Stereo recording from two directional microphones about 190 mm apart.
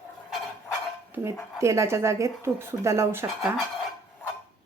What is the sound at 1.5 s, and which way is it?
A woman's voice, 15° right (ahead or behind).